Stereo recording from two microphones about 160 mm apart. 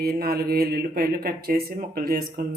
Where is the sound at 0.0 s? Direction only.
70° right (ahead or behind).